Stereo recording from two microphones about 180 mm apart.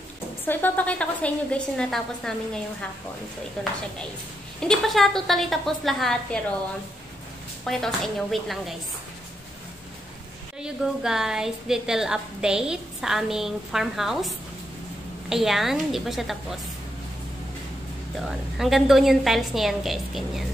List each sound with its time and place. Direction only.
0.5 s a woman's voice: 10° left (ahead or behind)
4.6 s a woman's voice: centre (ahead or behind)
7.6 s a woman's voice: centre (ahead or behind)
10.6 s a woman's voice: 5° right (ahead or behind)
18.2 s a woman's voice: centre (ahead or behind)